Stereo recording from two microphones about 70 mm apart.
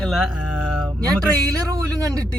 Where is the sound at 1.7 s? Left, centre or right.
Right.